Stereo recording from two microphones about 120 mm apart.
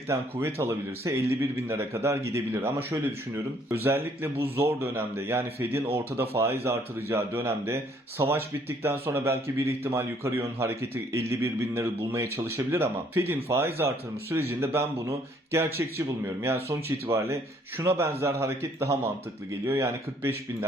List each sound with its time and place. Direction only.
0.1 s a man's voice: 20° right (ahead or behind)